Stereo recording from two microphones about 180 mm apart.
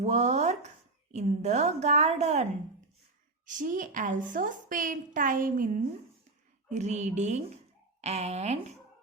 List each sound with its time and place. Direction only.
0.0 s a woman's voice: 40° right (ahead or behind)